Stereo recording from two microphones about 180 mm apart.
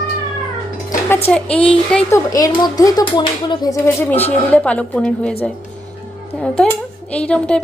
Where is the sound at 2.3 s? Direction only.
20° left (ahead or behind).